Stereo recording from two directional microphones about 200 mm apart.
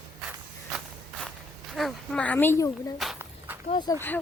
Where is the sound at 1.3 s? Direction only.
Centre (ahead or behind).